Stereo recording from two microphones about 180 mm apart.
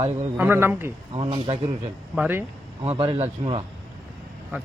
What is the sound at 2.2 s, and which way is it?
Speech, 10° right (ahead or behind).